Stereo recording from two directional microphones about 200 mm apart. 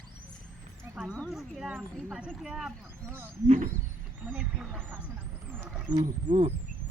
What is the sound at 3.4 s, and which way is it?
Speech, 35° right (ahead or behind).